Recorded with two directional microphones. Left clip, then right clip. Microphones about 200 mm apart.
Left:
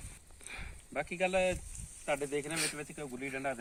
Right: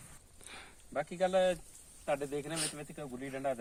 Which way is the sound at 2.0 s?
20° right (ahead or behind).